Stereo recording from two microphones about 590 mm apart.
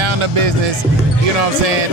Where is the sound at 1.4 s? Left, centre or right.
Right.